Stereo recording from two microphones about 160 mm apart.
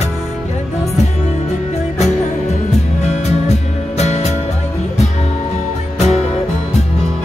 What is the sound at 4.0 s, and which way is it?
Music, 40° left (ahead or behind).